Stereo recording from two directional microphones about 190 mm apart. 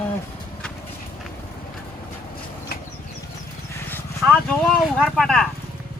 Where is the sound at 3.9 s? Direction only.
10° left (ahead or behind).